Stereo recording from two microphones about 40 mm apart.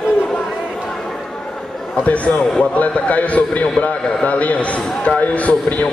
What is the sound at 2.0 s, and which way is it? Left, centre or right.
A man's voice, left.